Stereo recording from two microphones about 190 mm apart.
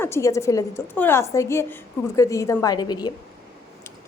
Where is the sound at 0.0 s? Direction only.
15° left (ahead or behind).